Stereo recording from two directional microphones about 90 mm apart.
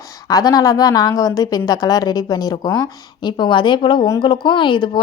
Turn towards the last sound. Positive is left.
turn(degrees=65)  # may be behind; listen again after turning